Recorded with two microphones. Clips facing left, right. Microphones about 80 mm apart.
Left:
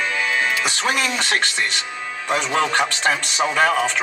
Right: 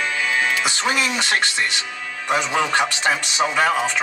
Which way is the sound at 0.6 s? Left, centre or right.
Centre.